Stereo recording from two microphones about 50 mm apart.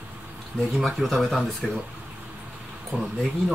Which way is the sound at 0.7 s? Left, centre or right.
Centre.